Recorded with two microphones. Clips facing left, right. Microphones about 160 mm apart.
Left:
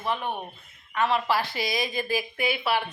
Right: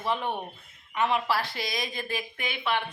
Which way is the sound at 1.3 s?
Centre (ahead or behind).